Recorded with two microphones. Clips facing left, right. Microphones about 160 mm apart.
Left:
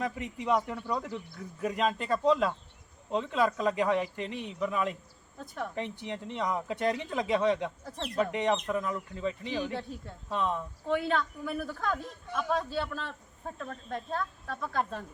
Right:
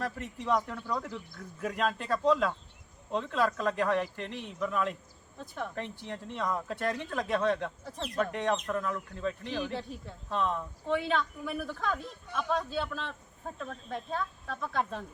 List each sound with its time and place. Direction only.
0.0 s a man's voice: 15° left (ahead or behind)
5.7 s a man's voice: 15° left (ahead or behind)
7.9 s speech: centre (ahead or behind)
8.2 s speech: 10° left (ahead or behind)